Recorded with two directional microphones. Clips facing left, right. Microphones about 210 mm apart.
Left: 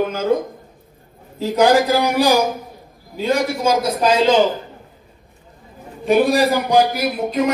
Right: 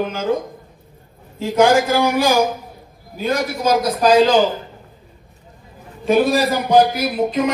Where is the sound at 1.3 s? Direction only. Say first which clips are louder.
Even; 40° left (ahead or behind).